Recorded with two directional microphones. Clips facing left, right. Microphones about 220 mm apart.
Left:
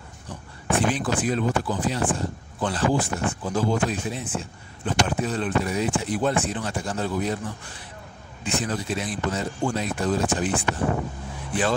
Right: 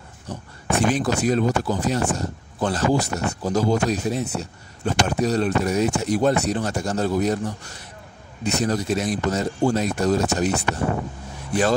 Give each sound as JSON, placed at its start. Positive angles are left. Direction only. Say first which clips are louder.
{"t": 0.3, "sound": "speech", "louder": "right 1 dB", "side_deg": -45}